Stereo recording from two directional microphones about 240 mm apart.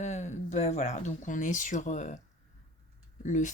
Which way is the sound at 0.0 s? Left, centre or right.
Left.